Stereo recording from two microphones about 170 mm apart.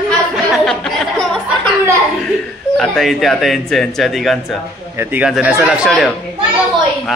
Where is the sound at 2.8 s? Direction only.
Centre (ahead or behind).